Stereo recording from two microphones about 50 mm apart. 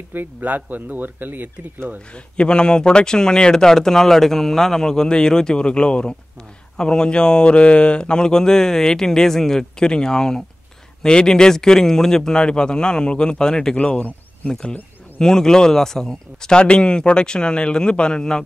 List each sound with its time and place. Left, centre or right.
0.1 s speech: right
2.1 s speech: left